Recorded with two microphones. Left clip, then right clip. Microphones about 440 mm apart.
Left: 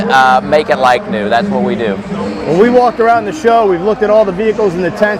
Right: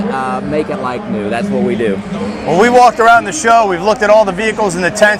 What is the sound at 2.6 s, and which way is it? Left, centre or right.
A man's voice, right.